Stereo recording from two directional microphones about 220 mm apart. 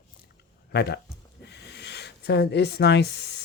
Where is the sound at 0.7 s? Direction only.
45° left (ahead or behind).